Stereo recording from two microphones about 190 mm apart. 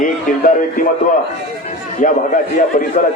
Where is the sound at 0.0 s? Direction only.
45° left (ahead or behind).